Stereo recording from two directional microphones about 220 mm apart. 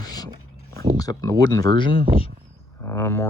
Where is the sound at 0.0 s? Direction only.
15° left (ahead or behind).